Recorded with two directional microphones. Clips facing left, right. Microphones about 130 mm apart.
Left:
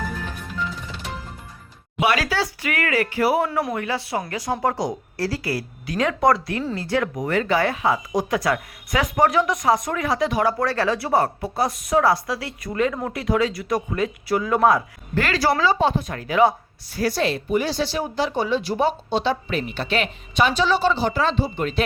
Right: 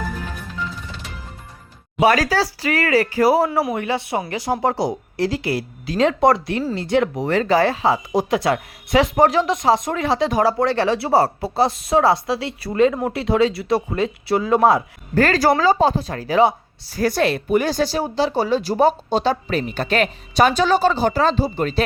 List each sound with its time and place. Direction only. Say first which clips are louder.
2.0 s speech: right 5 dB; 40° right (ahead or behind)
3.8 s speech: right 3 dB; 25° right (ahead or behind)
7.3 s speech: right 2 dB; 35° right (ahead or behind)
15.1 s speech: right 5 dB; 45° right (ahead or behind)
16.9 s speech: right 3 dB; 50° right (ahead or behind)